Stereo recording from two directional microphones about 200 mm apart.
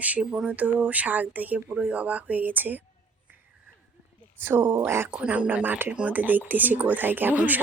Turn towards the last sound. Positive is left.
turn(degrees=-10)  # may be behind; listen again after turning